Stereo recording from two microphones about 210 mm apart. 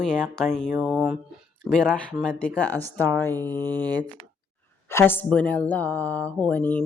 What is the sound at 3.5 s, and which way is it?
Speech, 20° right (ahead or behind).